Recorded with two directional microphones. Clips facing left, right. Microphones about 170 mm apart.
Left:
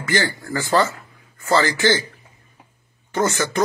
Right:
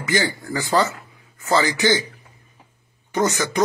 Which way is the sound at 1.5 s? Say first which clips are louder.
Left 1 dB; 15° right (ahead or behind).